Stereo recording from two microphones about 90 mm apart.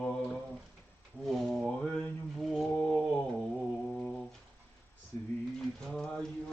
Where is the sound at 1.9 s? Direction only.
15° left (ahead or behind).